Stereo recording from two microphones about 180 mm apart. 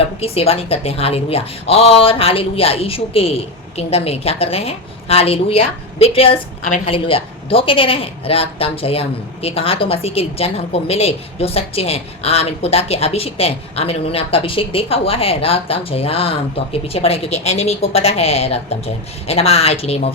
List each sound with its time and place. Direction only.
0.0 s speech: 35° left (ahead or behind)